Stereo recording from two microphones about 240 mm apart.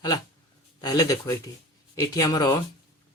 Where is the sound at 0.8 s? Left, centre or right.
Centre.